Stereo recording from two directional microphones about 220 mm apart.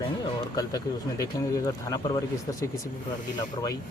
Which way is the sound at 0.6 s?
15° left (ahead or behind).